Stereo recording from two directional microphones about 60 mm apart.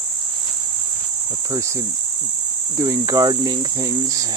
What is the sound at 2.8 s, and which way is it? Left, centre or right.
Cricket, right.